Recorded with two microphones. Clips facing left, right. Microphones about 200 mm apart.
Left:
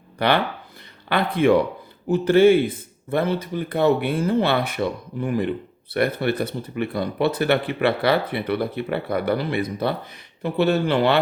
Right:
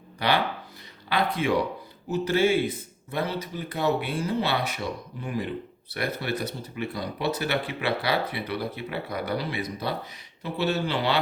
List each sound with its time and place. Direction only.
0.2 s speech: 55° left (ahead or behind)